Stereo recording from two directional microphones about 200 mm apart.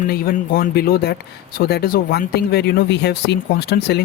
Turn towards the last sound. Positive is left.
turn(degrees=55)  # may be behind; listen again after turning